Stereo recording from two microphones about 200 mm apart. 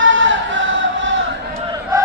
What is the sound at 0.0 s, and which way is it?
Music, 70° right (ahead or behind).